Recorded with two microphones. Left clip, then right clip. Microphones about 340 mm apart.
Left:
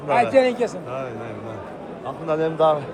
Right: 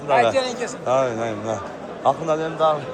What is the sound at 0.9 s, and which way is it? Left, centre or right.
Speech, centre.